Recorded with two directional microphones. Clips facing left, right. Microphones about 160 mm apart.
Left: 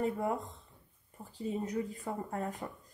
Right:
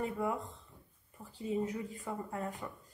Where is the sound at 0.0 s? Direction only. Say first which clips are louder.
Left 2 dB; 45° left (ahead or behind).